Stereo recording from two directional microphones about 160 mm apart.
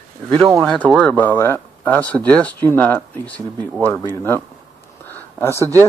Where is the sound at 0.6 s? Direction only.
5° left (ahead or behind).